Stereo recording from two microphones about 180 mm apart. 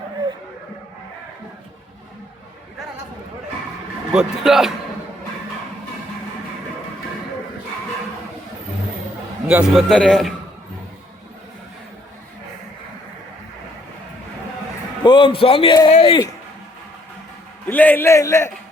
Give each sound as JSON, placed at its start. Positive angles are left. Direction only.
{"t": 4.1, "sound": "a man's voice", "side_deg": -5}
{"t": 9.5, "sound": "a man's voice", "side_deg": -5}
{"t": 9.9, "sound": "a man's voice", "side_deg": 5}
{"t": 15.0, "sound": "speech", "side_deg": 25}
{"t": 17.7, "sound": "a man's voice", "side_deg": 10}